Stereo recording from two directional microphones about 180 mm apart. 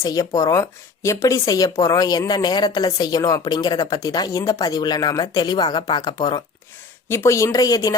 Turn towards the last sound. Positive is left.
turn(degrees=20)  # may be behind; listen again after turning